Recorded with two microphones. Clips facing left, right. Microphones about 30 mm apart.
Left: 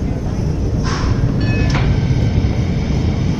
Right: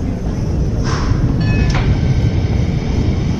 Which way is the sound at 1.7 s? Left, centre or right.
Centre.